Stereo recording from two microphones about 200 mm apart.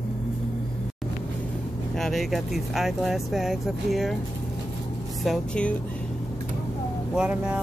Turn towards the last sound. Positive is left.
turn(degrees=-5)  # may be behind; listen again after turning